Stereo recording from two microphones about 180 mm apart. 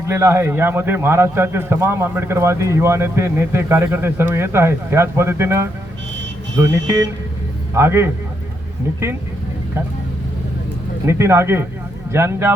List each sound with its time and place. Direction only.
0.1 s a man's voice: 15° right (ahead or behind)
11.0 s a man's voice: 15° right (ahead or behind)